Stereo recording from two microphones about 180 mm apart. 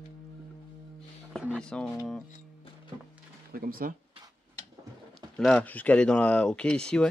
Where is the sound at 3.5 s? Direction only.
55° right (ahead or behind).